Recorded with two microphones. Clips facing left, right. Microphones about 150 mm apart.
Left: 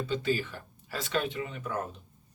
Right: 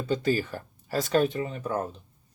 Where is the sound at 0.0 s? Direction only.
45° right (ahead or behind).